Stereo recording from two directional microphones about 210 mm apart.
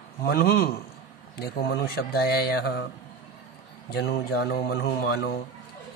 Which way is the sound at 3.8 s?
50° left (ahead or behind).